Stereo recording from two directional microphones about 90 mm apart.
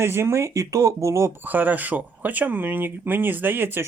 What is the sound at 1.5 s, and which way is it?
Speech, 20° right (ahead or behind).